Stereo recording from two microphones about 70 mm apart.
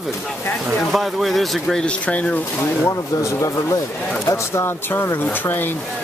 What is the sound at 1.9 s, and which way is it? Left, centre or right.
Speech, centre.